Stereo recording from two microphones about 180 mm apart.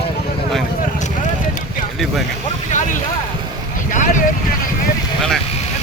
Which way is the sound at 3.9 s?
45° left (ahead or behind).